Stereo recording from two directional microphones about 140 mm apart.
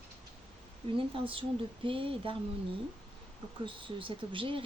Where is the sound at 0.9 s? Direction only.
40° right (ahead or behind).